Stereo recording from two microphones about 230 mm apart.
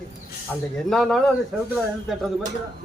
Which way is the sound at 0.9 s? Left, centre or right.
Centre.